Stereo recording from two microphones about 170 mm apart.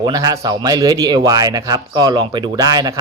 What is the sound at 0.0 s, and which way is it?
A man's voice, 20° right (ahead or behind).